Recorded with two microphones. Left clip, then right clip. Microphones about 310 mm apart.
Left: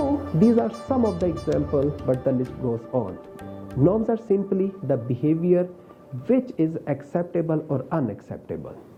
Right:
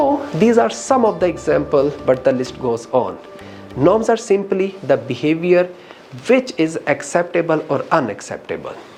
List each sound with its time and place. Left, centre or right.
0.3 s speech: centre
2.6 s speech: right; by 8.7 s centre